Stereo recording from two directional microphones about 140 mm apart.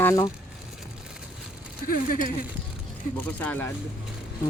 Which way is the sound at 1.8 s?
85° left.